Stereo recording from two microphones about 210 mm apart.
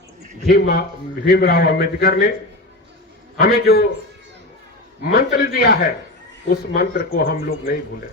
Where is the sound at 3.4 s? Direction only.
45° left (ahead or behind).